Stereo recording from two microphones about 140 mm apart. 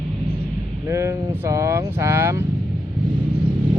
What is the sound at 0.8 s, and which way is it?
Speech, 20° right (ahead or behind).